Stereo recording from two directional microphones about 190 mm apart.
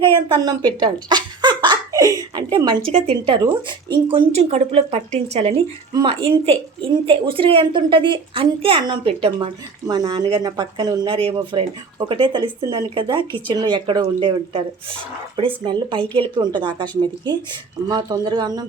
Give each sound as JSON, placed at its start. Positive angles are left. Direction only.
{"t": 0.0, "sound": "a sound", "side_deg": -25}
{"t": 0.8, "sound": "giggle", "side_deg": -20}
{"t": 2.9, "sound": "speech", "side_deg": -30}